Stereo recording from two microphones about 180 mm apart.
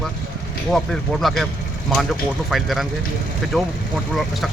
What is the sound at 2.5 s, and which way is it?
Speech, centre (ahead or behind).